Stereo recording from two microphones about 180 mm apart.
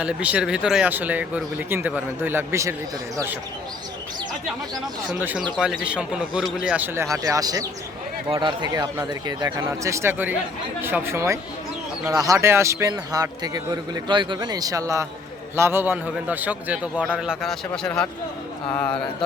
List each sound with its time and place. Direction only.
0.0 s speech: 5° right (ahead or behind)
5.0 s a man's voice: 10° right (ahead or behind)